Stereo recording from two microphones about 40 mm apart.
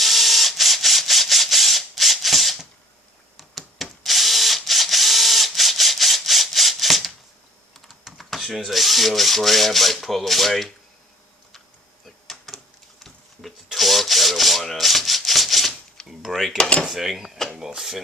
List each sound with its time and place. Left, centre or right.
0.0 s a sound: centre
3.8 s ratchet: centre
8.2 s power windows: centre
8.4 s speech: centre
13.7 s rub: centre
16.0 s a sound: centre
16.6 s drawer open or close: left
16.9 s drawer open or close: centre